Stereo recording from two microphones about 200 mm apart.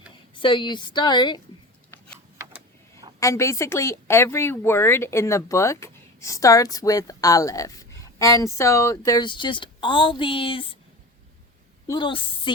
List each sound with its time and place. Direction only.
0.3 s a woman's voice: 25° left (ahead or behind)
3.2 s a woman's voice: 15° left (ahead or behind)
11.9 s speech: 25° left (ahead or behind)